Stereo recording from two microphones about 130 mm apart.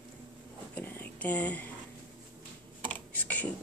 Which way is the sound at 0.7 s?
15° left (ahead or behind).